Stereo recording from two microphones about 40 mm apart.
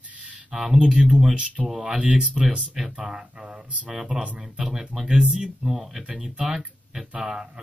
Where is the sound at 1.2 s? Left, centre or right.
Right.